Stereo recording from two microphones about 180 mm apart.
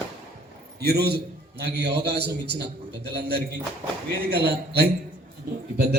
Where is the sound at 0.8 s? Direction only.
65° right (ahead or behind).